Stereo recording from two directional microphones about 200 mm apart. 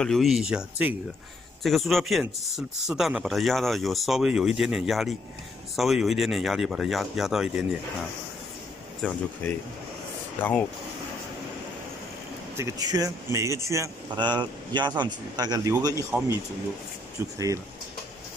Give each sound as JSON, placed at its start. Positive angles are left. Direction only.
{"t": 0.0, "sound": "speech", "side_deg": 0}
{"t": 9.0, "sound": "speech", "side_deg": 5}
{"t": 12.5, "sound": "speech", "side_deg": -15}
{"t": 16.1, "sound": "speech", "side_deg": -5}